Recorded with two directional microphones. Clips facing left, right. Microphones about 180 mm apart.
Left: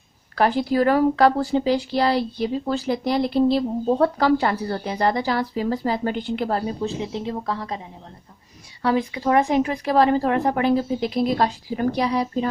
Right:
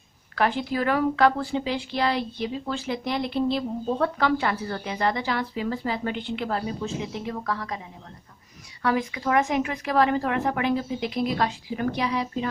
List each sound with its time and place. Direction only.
0.3 s speech: 35° left (ahead or behind)
8.8 s speech: 30° left (ahead or behind)